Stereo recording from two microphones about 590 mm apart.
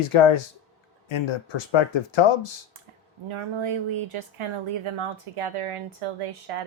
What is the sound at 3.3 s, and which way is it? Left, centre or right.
Speech, right.